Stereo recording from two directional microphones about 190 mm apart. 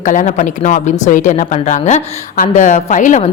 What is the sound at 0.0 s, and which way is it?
Speech, 40° left (ahead or behind).